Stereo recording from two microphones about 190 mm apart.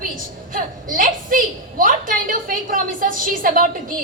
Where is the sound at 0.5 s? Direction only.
45° right (ahead or behind).